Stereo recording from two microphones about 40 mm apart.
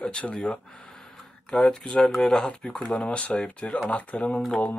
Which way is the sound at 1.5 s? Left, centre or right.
Left.